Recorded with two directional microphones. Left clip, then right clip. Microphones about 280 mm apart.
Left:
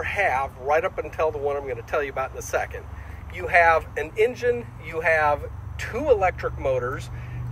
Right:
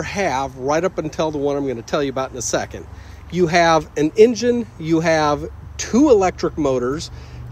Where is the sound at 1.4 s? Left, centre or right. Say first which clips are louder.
Right 6 dB; right.